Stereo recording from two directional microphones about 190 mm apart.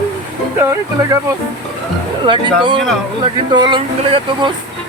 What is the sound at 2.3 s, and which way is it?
Speech, 25° right (ahead or behind).